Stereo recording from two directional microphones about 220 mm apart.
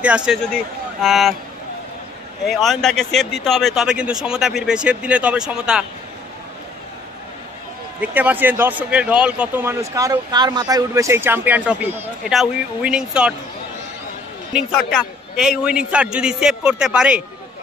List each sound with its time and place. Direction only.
0.0 s speech: 5° right (ahead or behind)
2.4 s speech: centre (ahead or behind)
8.0 s a man's voice: 5° right (ahead or behind)
14.5 s speech: centre (ahead or behind)